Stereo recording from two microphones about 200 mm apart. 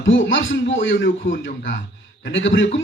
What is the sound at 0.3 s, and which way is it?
A man's voice, 70° left (ahead or behind).